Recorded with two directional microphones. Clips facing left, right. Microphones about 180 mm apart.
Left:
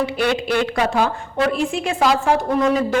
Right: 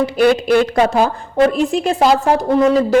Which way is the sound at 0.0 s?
40° right (ahead or behind).